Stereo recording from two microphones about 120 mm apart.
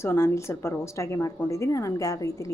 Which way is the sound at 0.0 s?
20° left (ahead or behind).